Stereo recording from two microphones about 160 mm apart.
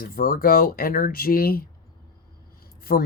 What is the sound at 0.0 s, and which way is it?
Speech, 65° left (ahead or behind).